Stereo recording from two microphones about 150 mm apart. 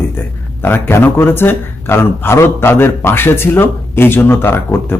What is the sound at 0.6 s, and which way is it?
A man's voice, 15° left (ahead or behind).